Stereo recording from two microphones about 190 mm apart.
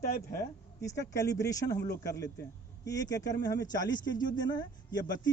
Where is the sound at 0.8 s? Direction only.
15° left (ahead or behind).